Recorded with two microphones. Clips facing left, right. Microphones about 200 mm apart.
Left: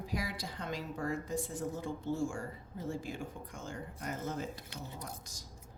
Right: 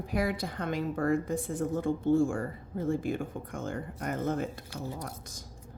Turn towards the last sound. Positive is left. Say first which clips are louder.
# right 5 dB
turn(degrees=-55)  # may be behind; listen again after turning